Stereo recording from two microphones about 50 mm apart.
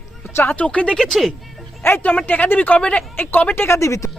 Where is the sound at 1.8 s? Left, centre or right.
Left.